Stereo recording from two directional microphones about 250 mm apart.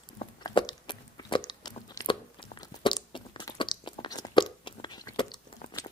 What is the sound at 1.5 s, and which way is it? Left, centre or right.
Crunch, centre.